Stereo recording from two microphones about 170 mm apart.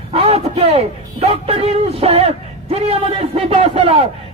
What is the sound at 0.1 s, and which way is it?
A man's voice, 35° right (ahead or behind).